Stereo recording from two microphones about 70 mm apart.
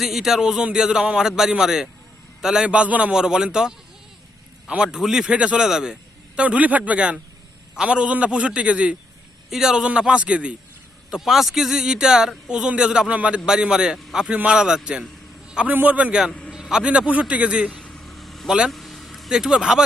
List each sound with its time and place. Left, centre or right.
0.0 s a man's voice: centre
11.1 s a man's voice: centre
15.4 s a sound: centre
15.7 s a man's voice: right
16.5 s a man's voice: centre
18.0 s vehicle: centre
18.4 s a man's voice: centre
18.7 s vehicle: centre